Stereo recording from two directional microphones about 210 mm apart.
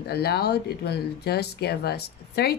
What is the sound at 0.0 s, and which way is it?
Speech, 50° left (ahead or behind).